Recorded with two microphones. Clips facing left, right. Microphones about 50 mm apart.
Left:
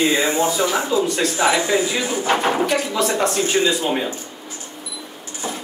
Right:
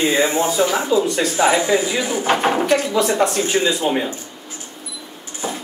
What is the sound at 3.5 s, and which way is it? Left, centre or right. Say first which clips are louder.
Speech: even; centre.